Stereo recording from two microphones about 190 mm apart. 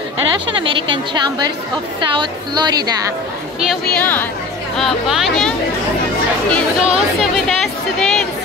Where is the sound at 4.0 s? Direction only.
10° left (ahead or behind).